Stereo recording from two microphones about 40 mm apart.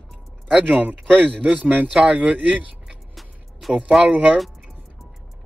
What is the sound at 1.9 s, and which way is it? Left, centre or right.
Speech, right.